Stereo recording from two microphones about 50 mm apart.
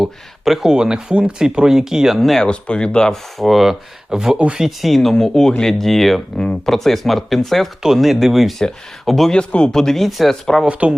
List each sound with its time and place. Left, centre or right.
0.0 s speech: centre
2.4 s speech: centre
3.3 s speech: centre
6.3 s speech: centre
9.3 s speech: left
9.7 s speech: centre
10.7 s speech: right